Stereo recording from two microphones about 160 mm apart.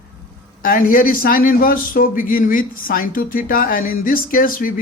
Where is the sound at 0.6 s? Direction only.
60° left (ahead or behind).